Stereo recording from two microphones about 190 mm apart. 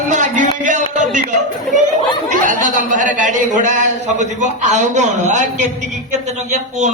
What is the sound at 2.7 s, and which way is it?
A man's voice, 45° right (ahead or behind).